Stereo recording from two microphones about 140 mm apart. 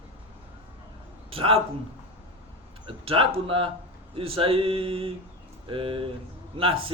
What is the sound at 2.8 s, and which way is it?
Speech, 40° right (ahead or behind).